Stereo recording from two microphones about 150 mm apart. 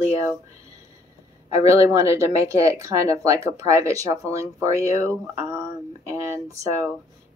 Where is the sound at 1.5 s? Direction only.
20° right (ahead or behind).